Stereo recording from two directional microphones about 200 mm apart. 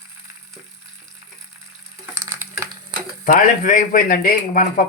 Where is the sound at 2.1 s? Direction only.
15° right (ahead or behind).